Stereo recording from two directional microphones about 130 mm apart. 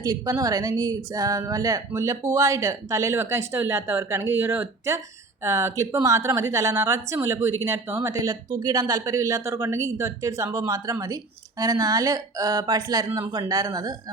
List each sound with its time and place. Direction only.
0.0 s a woman's voice: 25° right (ahead or behind)